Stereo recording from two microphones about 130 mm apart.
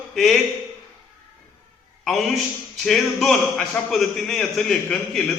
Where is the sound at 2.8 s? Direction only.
Centre (ahead or behind).